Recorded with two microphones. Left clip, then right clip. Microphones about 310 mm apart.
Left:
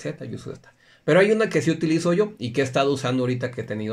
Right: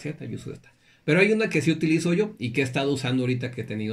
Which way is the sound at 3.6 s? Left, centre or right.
Left.